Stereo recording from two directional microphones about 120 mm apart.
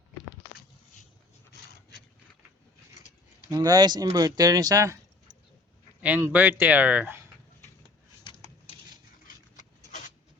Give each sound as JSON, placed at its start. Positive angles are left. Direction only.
{"t": 3.5, "sound": "speech", "side_deg": -35}
{"t": 6.0, "sound": "speech", "side_deg": -15}
{"t": 8.2, "sound": "a sound", "side_deg": 40}
{"t": 9.6, "sound": "rub", "side_deg": 90}